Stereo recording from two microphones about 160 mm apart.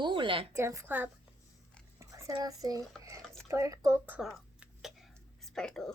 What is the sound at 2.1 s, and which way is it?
Speech, 20° right (ahead or behind).